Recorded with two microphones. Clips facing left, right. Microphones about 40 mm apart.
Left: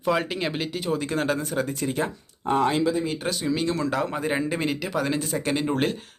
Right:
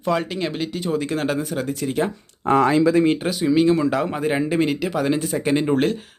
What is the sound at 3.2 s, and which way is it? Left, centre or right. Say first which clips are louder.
Speech: right 8 dB; centre.